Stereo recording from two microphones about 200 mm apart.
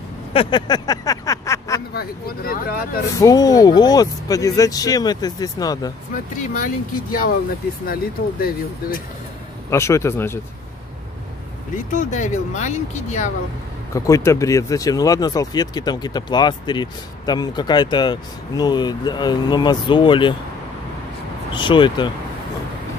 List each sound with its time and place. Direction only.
0.3 s a sound: 25° left (ahead or behind)
2.0 s speech: 50° left (ahead or behind)
3.2 s speech: 20° left (ahead or behind)
6.3 s speech: 40° left (ahead or behind)
9.7 s speech: 15° left (ahead or behind)
11.7 s speech: 40° left (ahead or behind)
13.9 s speech: 15° left (ahead or behind)
21.5 s speech: 25° left (ahead or behind)